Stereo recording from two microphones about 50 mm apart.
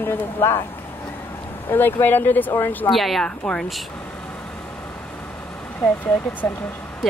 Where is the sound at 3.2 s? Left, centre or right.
Centre.